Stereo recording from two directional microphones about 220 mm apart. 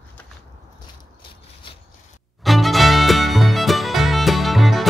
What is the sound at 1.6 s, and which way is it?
Scissors, 25° left (ahead or behind).